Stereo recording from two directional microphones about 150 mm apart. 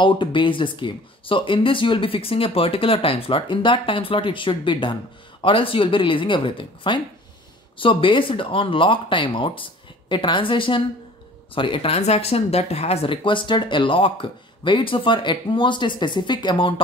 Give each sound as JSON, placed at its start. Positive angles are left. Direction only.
{"t": 0.0, "sound": "speech", "side_deg": 35}